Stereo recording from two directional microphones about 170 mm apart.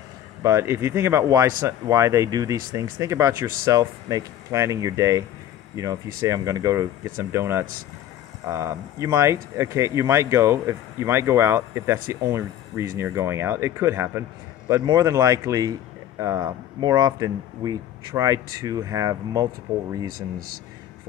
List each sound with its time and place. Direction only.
0.4 s speech: 15° right (ahead or behind)
20.1 s speech: 60° right (ahead or behind)